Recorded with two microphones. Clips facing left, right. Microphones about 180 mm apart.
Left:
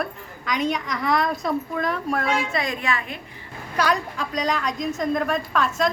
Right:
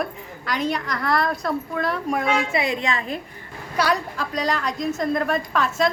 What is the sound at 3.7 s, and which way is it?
A woman's voice, 5° right (ahead or behind).